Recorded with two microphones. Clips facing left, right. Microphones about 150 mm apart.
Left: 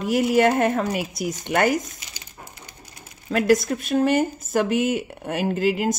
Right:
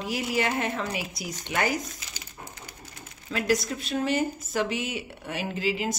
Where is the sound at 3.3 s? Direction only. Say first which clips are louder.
Left 7 dB; 50° left (ahead or behind).